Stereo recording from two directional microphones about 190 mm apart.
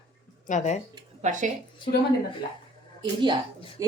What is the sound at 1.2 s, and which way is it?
Speech, 40° right (ahead or behind).